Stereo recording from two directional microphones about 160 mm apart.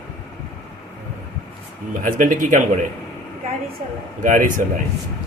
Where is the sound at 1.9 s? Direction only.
55° right (ahead or behind).